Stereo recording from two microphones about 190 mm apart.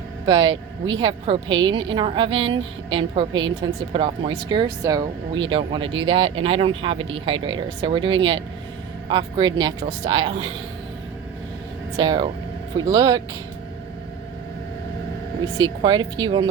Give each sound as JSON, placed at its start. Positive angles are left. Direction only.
{"t": 0.3, "sound": "speech", "side_deg": -25}
{"t": 11.9, "sound": "speech", "side_deg": -25}
{"t": 15.5, "sound": "speech", "side_deg": -20}